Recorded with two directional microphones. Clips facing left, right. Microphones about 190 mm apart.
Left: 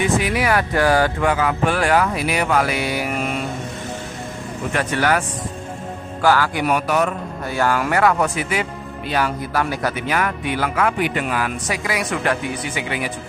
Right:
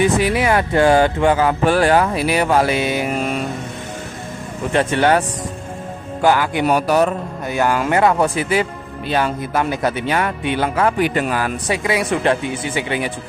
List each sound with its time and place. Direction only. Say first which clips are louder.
0.3 s a man's voice: right 3 dB; 25° right (ahead or behind)
4.7 s a man's voice: right 5 dB; 25° right (ahead or behind)
6.2 s a man's voice: right 2 dB; 20° right (ahead or behind)
7.4 s a man's voice: right 2 dB; 20° right (ahead or behind)